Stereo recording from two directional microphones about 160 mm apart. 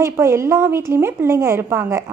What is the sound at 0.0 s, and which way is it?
A woman's voice, 15° right (ahead or behind).